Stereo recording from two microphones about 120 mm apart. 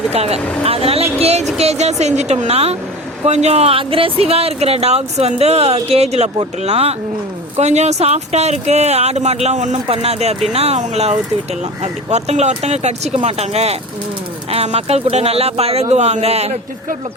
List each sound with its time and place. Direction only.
0.1 s speech: 60° right (ahead or behind)
9.8 s speech: 55° right (ahead or behind)